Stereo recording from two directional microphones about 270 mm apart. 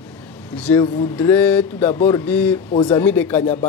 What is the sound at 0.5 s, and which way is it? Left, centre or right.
Speech, centre.